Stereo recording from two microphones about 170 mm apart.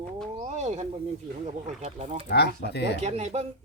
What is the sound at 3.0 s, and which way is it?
Speech, 40° right (ahead or behind).